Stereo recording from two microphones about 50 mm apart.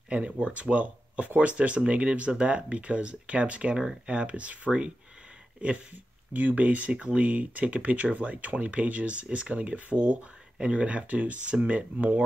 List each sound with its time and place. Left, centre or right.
0.1 s speech: right